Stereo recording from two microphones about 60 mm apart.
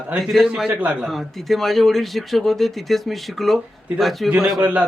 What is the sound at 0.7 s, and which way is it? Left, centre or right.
Speech, right.